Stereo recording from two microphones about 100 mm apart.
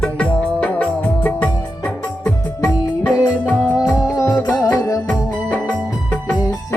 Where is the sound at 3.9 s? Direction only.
30° left (ahead or behind).